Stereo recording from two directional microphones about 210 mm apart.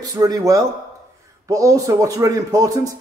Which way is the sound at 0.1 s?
15° right (ahead or behind).